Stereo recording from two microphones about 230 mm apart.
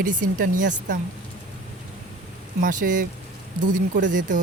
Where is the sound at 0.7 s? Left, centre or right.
Right.